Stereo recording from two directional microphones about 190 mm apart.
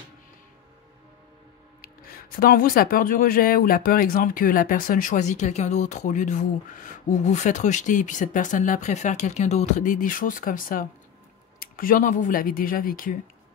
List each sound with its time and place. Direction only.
1.8 s speech: 50° left (ahead or behind)